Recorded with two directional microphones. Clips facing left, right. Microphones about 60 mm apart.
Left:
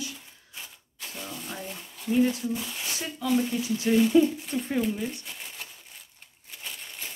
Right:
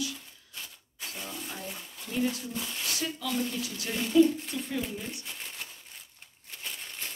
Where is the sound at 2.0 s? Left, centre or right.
Centre; by 4.7 s left.